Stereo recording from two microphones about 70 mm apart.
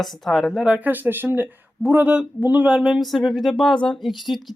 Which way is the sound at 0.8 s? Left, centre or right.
Right.